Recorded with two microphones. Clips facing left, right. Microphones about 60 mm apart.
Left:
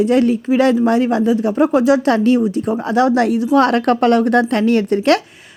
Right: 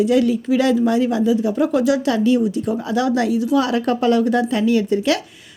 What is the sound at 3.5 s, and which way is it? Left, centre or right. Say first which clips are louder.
A woman's voice: left 7 dB; left.